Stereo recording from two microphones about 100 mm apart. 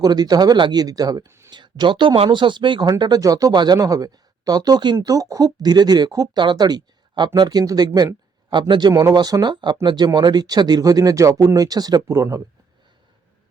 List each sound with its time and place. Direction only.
0.0 s speech: 40° right (ahead or behind)
1.5 s speech: 50° right (ahead or behind)
3.0 s speech: 40° right (ahead or behind)
8.9 s speech: 35° right (ahead or behind)